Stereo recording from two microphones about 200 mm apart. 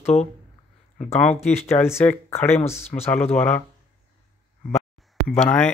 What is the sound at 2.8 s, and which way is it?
Speech, 30° left (ahead or behind).